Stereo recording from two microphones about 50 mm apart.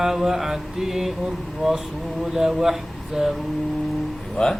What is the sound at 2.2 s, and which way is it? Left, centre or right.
Speech, centre.